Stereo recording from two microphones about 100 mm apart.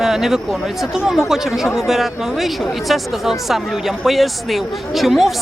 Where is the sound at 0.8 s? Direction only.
5° right (ahead or behind).